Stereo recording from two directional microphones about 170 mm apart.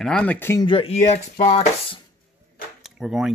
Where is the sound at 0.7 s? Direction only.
35° left (ahead or behind).